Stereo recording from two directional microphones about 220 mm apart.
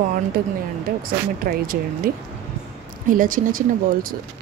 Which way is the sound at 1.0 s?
40° right (ahead or behind).